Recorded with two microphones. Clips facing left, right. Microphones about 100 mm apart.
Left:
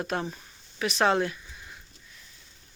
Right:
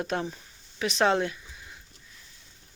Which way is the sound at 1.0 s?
25° right (ahead or behind).